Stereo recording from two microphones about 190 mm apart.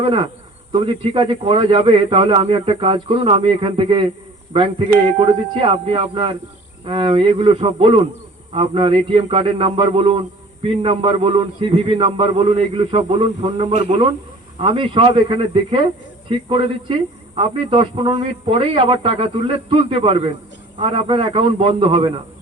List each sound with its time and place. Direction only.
0.0 s speech: 30° right (ahead or behind)
5.2 s a man's voice: 30° right (ahead or behind)